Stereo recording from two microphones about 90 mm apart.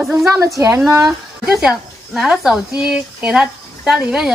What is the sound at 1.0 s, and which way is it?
A woman's voice, 5° right (ahead or behind).